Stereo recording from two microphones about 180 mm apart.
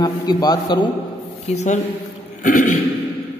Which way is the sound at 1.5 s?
40° left (ahead or behind).